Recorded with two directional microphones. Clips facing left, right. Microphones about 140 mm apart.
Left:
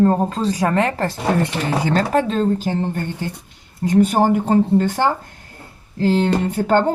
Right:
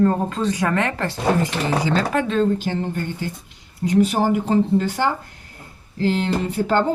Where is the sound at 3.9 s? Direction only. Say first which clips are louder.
Left 3 dB; 50° left (ahead or behind).